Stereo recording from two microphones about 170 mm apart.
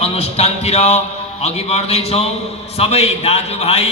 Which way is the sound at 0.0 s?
35° left (ahead or behind).